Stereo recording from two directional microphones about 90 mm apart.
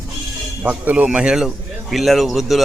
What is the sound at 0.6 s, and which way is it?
Speech, 15° right (ahead or behind).